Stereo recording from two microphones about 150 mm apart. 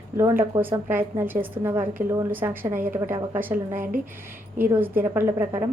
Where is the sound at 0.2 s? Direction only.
15° right (ahead or behind).